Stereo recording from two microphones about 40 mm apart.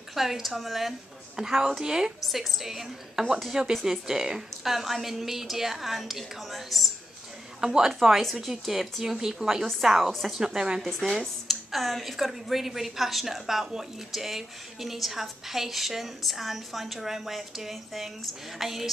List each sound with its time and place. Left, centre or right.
0.1 s speech: centre
1.3 s a woman's voice: centre
2.2 s a woman's voice: centre
4.6 s speech: centre
7.6 s a woman's voice: centre
10.8 s speech: centre
11.1 s speech: centre